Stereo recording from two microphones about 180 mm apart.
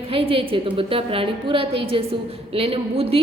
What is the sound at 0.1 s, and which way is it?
A woman's voice, 30° right (ahead or behind).